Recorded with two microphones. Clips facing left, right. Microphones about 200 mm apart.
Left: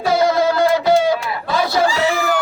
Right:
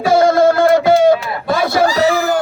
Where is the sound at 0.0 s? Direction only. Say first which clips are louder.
Right 5 dB; 50° right (ahead or behind).